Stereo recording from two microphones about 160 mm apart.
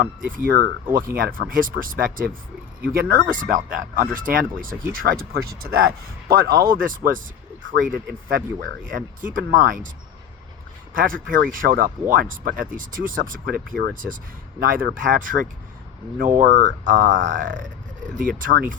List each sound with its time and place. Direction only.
0.0 s speech: 60° right (ahead or behind)
10.9 s speech: 60° right (ahead or behind)